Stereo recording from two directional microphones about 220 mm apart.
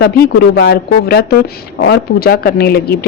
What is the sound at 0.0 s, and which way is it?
Speech, 45° left (ahead or behind).